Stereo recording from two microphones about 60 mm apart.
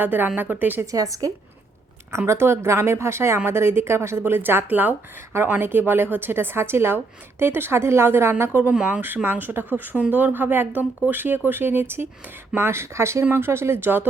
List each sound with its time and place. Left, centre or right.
0.0 s a woman's voice: right
0.9 s a woman's voice: right
2.1 s a woman's voice: right
8.9 s a woman's voice: right